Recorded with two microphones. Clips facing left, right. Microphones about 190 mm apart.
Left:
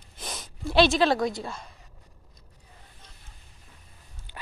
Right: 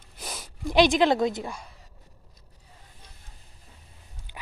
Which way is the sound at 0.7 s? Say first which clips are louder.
Right 1 dB; 15° right (ahead or behind).